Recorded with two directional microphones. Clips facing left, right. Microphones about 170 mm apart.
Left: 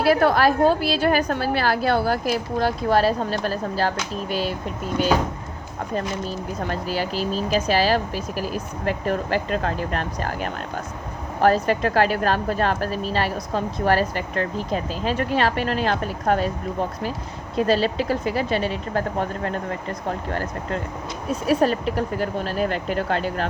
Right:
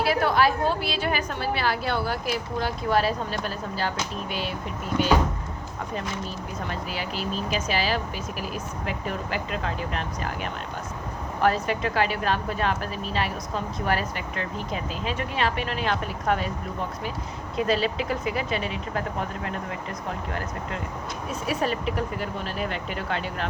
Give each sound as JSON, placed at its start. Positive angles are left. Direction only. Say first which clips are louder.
{"t": 0.0, "sound": "a woman's voice", "louder": "left 5 dB", "side_deg": 40}
{"t": 5.9, "sound": "a woman's voice", "louder": "left 6 dB", "side_deg": 40}
{"t": 17.6, "sound": "a woman's voice", "louder": "left 4 dB", "side_deg": 35}